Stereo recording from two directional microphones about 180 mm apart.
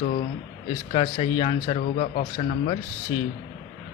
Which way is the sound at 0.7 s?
30° left (ahead or behind).